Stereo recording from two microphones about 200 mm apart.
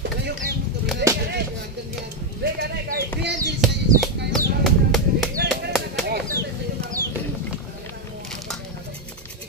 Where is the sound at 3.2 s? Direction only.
55° right (ahead or behind).